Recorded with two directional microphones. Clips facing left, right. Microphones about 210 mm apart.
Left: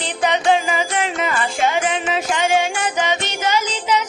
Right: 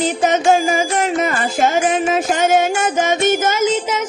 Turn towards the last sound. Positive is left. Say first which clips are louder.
# right 3 dB
turn(degrees=-45)  # may be behind; listen again after turning